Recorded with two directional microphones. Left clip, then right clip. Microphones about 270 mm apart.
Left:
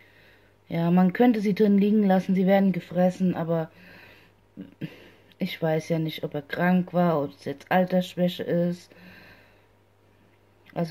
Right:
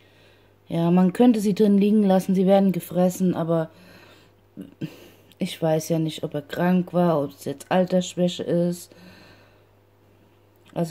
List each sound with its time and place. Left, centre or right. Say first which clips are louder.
0.2 s speech: right 1 dB; right